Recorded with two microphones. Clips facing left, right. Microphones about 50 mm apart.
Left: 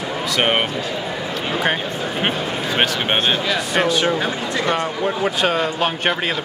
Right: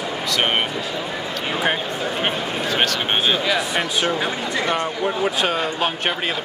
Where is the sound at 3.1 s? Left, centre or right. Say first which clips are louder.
Right 1 dB; centre.